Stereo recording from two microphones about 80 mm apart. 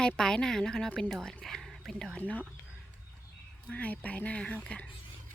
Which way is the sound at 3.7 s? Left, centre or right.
Centre.